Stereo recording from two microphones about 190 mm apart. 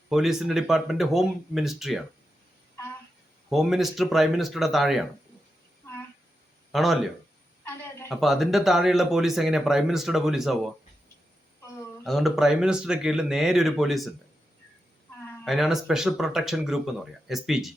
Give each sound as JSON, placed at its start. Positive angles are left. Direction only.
{"t": 0.1, "sound": "speech", "side_deg": 0}
{"t": 3.5, "sound": "speech", "side_deg": 0}
{"t": 6.7, "sound": "speech", "side_deg": 0}
{"t": 7.6, "sound": "a sound", "side_deg": 15}
{"t": 8.1, "sound": "speech", "side_deg": 0}
{"t": 12.0, "sound": "speech", "side_deg": 0}
{"t": 15.4, "sound": "speech", "side_deg": 0}